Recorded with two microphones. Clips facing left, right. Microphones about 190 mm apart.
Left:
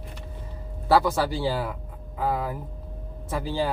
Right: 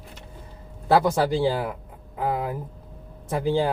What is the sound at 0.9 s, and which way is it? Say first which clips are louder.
Speech: right 2 dB; 20° right (ahead or behind).